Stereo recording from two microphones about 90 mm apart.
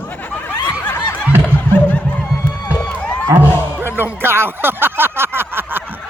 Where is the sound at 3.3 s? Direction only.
25° right (ahead or behind).